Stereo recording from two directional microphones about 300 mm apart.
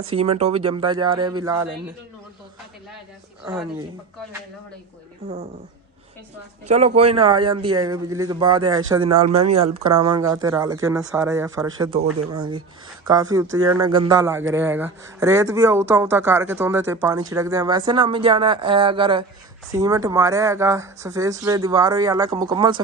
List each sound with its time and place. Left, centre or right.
0.1 s speech: centre
3.4 s speech: centre
6.7 s speech: right
9.2 s speech: right
9.9 s speech: centre